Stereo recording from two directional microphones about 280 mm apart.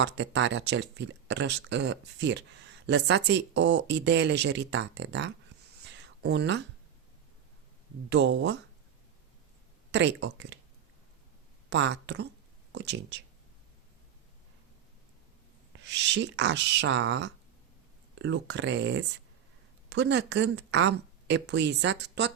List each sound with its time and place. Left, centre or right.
0.0 s speech: right
5.9 s a sound: right
8.1 s speech: right
9.9 s speech: right
11.7 s speech: right
15.7 s speech: right